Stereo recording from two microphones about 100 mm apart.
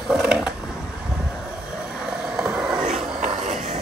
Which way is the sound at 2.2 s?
10° right (ahead or behind).